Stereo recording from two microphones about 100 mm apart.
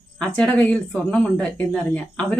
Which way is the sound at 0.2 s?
10° left (ahead or behind).